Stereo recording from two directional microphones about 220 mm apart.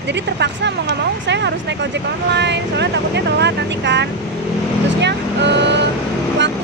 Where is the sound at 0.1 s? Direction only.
50° right (ahead or behind).